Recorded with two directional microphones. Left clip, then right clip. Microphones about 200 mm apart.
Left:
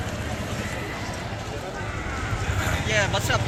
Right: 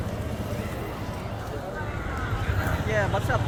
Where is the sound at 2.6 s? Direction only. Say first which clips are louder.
Left 3 dB; 25° right (ahead or behind).